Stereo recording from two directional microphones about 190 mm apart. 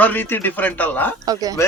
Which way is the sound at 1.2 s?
20° right (ahead or behind).